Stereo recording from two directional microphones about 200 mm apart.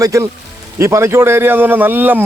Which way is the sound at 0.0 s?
15° right (ahead or behind).